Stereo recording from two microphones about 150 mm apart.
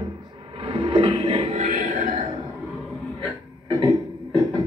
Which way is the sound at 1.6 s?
55° right (ahead or behind).